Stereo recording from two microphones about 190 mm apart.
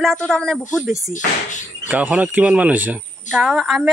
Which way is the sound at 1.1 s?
40° left (ahead or behind).